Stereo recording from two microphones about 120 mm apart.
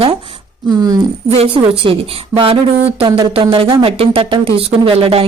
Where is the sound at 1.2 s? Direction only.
55° right (ahead or behind).